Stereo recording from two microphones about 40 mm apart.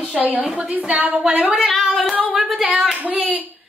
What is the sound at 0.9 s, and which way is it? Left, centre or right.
Speech, right.